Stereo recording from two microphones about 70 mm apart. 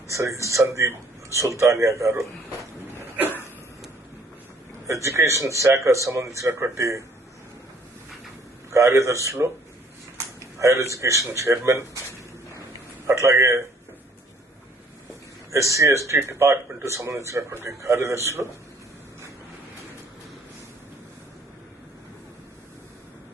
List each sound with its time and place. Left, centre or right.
0.1 s a man's voice: right
5.0 s a man's voice: right
8.7 s a man's voice: right
10.6 s a man's voice: right
13.1 s a man's voice: right
15.5 s a man's voice: right